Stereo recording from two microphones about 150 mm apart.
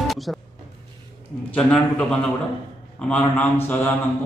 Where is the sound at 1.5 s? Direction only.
5° left (ahead or behind).